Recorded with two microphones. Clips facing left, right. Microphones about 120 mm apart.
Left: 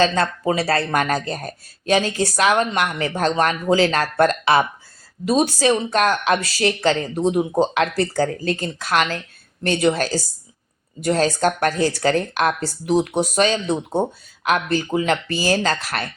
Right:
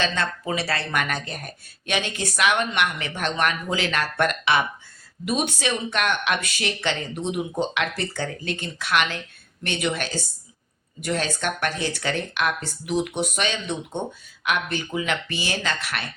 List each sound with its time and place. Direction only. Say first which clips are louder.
0.0 s speech: left 7 dB; 40° left (ahead or behind)